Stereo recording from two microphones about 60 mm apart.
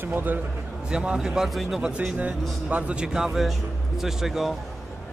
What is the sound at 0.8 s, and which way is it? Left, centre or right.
Speech, centre.